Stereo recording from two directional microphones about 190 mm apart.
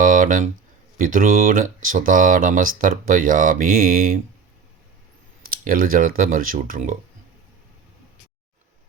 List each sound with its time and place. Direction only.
0.0 s a sound: 45° right (ahead or behind)
0.9 s speech: 45° right (ahead or behind)
5.5 s speech: 50° right (ahead or behind)